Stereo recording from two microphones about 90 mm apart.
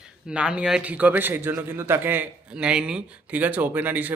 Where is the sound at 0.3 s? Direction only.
10° right (ahead or behind).